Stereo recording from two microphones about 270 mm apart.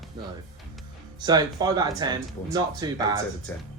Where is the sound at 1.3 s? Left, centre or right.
Centre.